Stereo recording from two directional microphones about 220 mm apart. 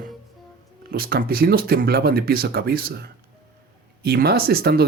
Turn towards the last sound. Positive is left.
turn(degrees=-45)  # may be behind; listen again after turning